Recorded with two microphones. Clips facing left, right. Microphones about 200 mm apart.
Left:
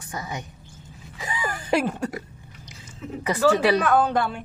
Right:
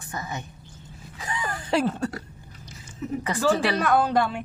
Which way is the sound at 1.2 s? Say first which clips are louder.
Left 1 dB; 10° left (ahead or behind).